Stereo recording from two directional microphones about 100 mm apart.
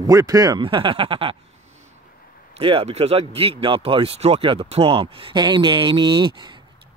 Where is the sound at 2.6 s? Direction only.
70° right (ahead or behind).